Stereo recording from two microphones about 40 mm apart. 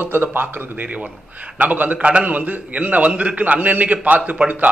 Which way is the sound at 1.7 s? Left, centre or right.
Right.